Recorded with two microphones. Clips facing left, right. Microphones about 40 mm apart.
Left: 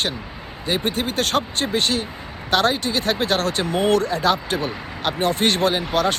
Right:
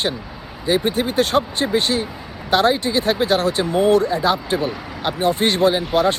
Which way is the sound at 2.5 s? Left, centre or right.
Centre.